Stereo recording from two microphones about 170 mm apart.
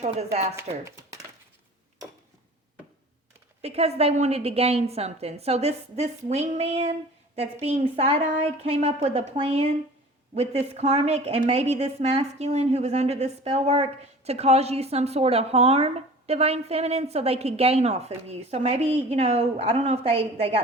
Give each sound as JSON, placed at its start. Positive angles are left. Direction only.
{"t": 0.0, "sound": "speech", "side_deg": -40}
{"t": 0.5, "sound": "speech", "side_deg": -15}
{"t": 3.6, "sound": "speech", "side_deg": -35}